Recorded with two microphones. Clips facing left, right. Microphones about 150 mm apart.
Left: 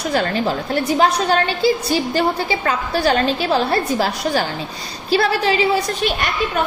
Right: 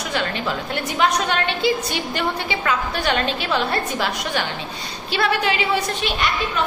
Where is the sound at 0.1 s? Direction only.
40° left (ahead or behind).